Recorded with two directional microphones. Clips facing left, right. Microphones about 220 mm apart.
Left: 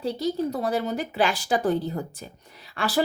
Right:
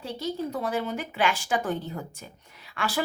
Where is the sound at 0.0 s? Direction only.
35° left (ahead or behind).